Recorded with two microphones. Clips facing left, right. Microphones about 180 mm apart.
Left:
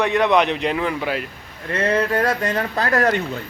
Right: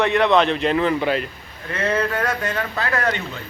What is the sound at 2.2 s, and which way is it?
Speech, 35° left (ahead or behind).